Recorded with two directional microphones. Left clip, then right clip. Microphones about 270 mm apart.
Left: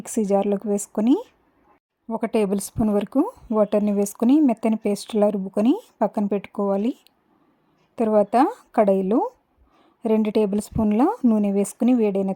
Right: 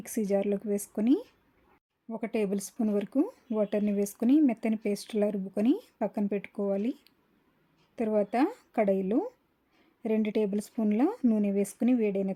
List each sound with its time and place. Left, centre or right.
0.0 s speech: centre
2.0 s speech: left